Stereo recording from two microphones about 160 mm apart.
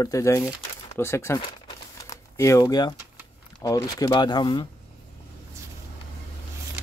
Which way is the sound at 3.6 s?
25° left (ahead or behind).